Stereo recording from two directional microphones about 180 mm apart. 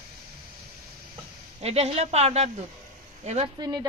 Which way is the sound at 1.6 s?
35° right (ahead or behind).